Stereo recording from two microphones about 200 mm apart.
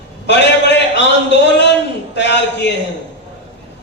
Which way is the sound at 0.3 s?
60° left (ahead or behind).